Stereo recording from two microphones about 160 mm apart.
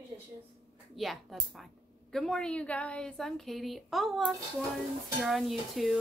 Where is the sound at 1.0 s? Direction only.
Centre (ahead or behind).